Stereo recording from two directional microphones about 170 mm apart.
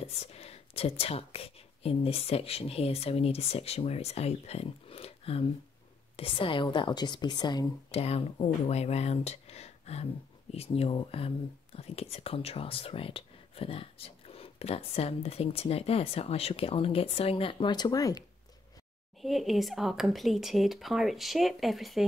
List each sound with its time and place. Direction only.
0.0 s a woman's voice: 35° left (ahead or behind)
7.9 s speech: 35° left (ahead or behind); by 18.2 s 20° left (ahead or behind)
19.2 s speech: centre (ahead or behind)